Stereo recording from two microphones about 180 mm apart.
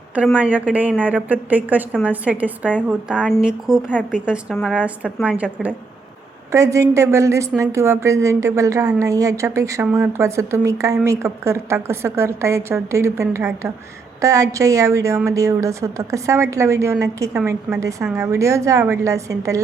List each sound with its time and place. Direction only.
0.3 s a woman's voice: 10° right (ahead or behind)
6.5 s a woman's voice: 15° right (ahead or behind)